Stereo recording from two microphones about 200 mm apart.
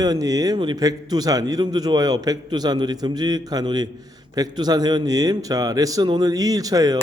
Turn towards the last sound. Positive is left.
turn(degrees=-20)  # may be behind; listen again after turning